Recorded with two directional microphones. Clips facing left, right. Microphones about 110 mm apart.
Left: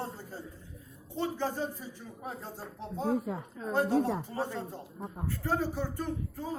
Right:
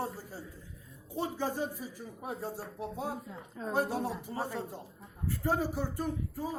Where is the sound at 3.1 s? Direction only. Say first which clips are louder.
Left 11 dB; 80° left.